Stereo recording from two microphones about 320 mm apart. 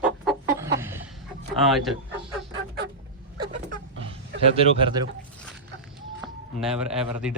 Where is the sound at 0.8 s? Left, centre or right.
Centre.